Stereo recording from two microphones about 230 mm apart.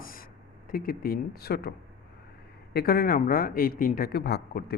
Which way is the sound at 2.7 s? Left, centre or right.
Left.